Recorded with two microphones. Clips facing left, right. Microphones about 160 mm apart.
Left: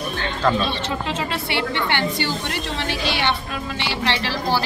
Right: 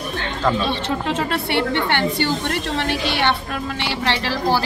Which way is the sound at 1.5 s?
50° right (ahead or behind).